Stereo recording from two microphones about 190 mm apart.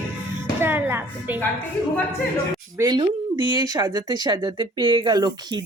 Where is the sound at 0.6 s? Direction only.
10° right (ahead or behind).